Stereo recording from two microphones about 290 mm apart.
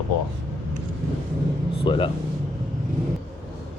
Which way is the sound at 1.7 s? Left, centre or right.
Centre.